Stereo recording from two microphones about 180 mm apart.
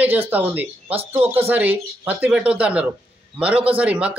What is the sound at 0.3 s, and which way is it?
Speech, 10° right (ahead or behind).